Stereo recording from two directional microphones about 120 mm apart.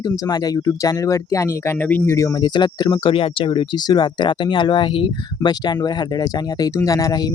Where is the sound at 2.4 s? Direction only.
40° left (ahead or behind).